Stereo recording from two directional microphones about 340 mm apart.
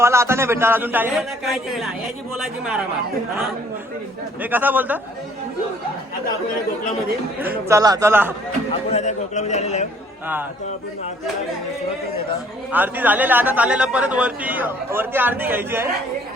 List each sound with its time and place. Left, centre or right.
0.0 s a man's voice: centre
4.4 s a man's voice: centre
7.3 s a man's voice: centre
8.9 s a man's voice: centre
12.7 s a man's voice: centre